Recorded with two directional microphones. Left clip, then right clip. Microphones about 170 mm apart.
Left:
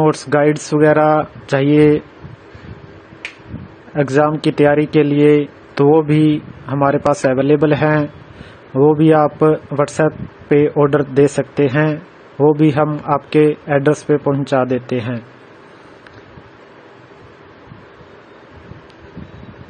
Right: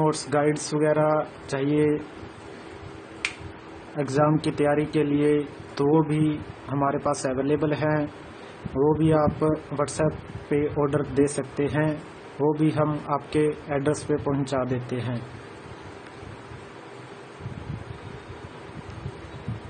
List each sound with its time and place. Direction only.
0.0 s speech: 35° left (ahead or behind)
3.9 s speech: 40° left (ahead or behind)